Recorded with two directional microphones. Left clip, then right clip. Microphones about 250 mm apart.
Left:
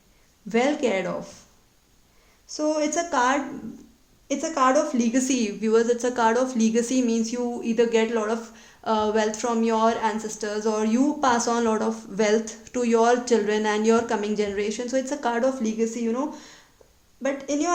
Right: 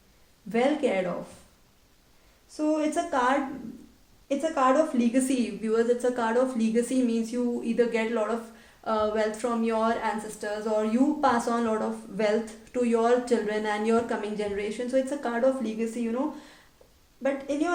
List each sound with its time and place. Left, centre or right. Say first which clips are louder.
0.5 s a woman's voice: left 2 dB; left
2.6 s a woman's voice: left 3 dB; left
17.2 s a woman's voice: left 3 dB; left